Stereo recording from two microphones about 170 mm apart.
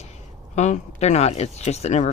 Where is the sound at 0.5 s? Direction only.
45° left (ahead or behind).